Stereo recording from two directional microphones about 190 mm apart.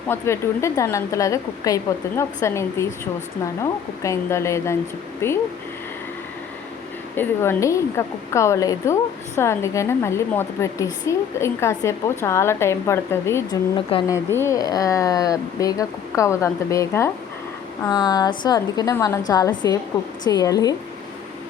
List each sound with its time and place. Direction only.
0.1 s a woman's voice: 15° left (ahead or behind)
7.2 s a woman's voice: 15° left (ahead or behind)